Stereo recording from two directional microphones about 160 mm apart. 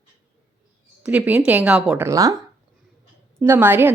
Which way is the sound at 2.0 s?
20° right (ahead or behind).